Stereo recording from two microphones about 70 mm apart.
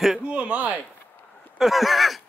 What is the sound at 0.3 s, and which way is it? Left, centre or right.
Speech, centre.